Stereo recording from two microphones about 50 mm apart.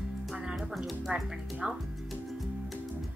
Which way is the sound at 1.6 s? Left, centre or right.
Centre.